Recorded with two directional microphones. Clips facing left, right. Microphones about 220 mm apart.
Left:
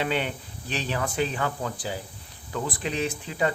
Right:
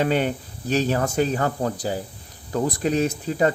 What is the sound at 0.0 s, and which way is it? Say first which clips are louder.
Speech: right 6 dB; 45° right (ahead or behind).